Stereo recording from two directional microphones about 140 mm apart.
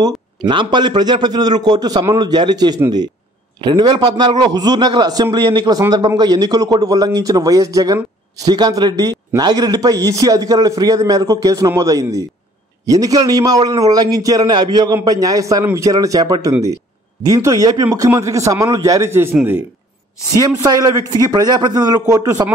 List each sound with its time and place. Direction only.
0.4 s a man's voice: 35° right (ahead or behind); by 19.6 s 15° right (ahead or behind)
20.3 s a man's voice: 30° right (ahead or behind)